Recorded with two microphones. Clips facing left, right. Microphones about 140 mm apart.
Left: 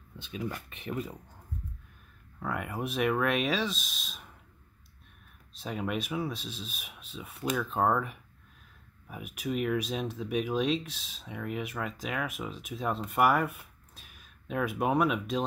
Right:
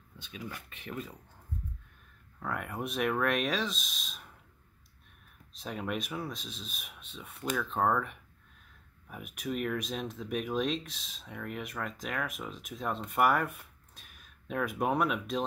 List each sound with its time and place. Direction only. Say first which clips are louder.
0.7 s speech: left 5 dB; 20° left (ahead or behind)
2.4 s speech: left 2 dB; 5° left (ahead or behind)
5.6 s speech: left 2 dB; centre (ahead or behind)